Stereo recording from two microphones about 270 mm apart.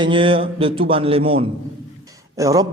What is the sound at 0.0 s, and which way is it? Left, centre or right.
A man's voice, centre.